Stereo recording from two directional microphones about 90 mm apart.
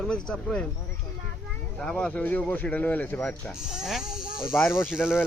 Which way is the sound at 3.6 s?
5° right (ahead or behind).